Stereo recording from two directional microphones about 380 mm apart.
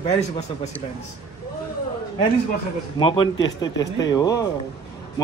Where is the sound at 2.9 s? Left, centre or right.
Centre.